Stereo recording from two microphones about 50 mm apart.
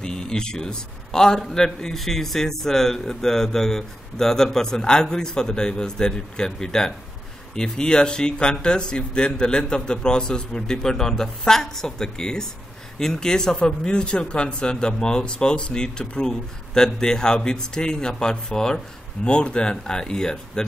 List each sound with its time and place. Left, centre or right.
0.0 s a man's voice: centre